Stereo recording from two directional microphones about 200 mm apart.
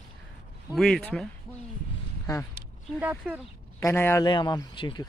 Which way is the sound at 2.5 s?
10° right (ahead or behind).